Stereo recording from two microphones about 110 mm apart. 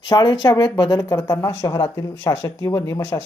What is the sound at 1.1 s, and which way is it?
Speech, 25° left (ahead or behind).